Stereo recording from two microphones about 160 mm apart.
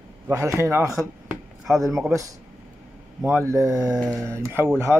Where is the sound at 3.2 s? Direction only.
10° right (ahead or behind).